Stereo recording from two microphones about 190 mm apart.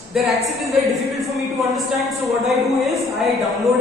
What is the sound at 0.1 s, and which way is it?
A woman's voice, centre (ahead or behind).